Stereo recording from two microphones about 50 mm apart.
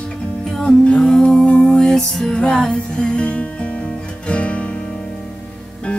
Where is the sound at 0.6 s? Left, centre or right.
Centre.